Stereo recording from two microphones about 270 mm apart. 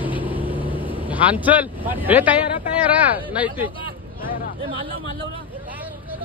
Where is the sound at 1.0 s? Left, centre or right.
Centre.